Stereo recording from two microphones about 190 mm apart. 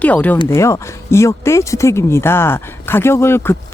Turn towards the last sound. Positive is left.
turn(degrees=10)  # may be behind; listen again after turning